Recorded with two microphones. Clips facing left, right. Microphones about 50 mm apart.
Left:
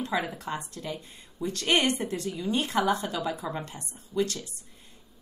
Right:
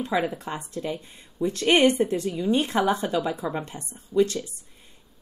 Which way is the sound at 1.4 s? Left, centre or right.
Right.